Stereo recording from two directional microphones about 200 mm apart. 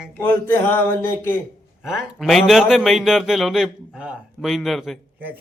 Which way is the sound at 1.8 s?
Centre (ahead or behind).